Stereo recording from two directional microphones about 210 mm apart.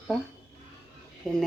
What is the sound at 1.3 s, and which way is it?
Speech, centre (ahead or behind).